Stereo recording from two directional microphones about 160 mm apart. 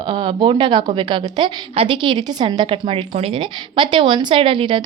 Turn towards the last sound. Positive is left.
turn(degrees=-30)  # may be behind; listen again after turning